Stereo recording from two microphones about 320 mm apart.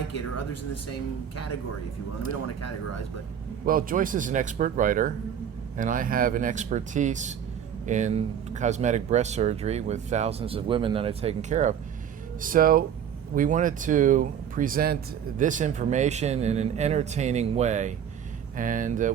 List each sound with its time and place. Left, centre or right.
0.1 s speech: left
3.7 s speech: right